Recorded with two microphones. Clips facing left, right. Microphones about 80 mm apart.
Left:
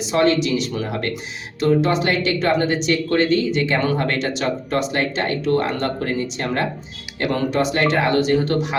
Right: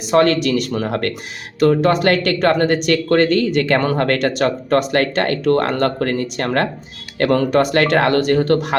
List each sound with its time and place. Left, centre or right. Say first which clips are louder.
0.1 s speech: right 4 dB; right
7.2 s speech: right 5 dB; right